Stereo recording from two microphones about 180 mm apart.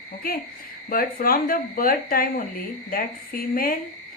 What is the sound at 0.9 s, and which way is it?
Speech, 55° left (ahead or behind).